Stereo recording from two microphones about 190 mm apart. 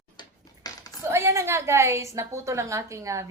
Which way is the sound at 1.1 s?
15° right (ahead or behind).